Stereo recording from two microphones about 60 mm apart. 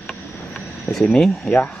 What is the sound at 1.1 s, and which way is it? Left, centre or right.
Speech, centre.